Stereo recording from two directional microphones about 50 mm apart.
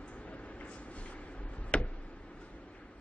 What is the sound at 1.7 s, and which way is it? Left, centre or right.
Tick-tock, left.